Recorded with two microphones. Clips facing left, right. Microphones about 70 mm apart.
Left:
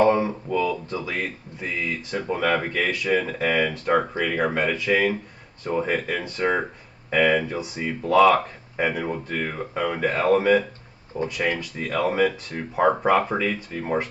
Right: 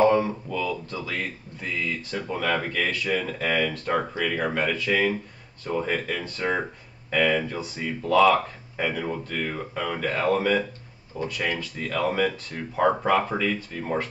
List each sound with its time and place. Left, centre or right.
0.1 s speech: centre